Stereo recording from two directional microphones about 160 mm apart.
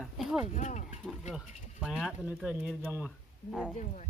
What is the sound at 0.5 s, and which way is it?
Speech, 50° left (ahead or behind).